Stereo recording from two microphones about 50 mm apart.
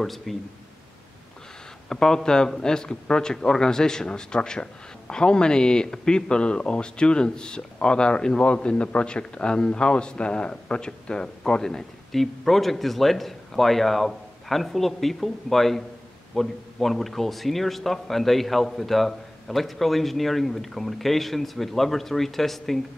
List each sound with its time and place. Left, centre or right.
0.0 s a man's voice: centre
1.9 s a man's voice: centre